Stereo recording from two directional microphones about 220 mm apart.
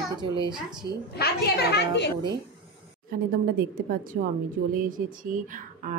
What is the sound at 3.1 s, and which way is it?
A woman's voice, 40° right (ahead or behind).